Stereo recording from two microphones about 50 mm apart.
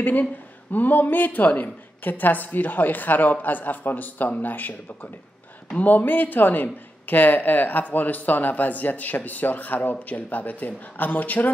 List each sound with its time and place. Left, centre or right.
0.0 s speech: left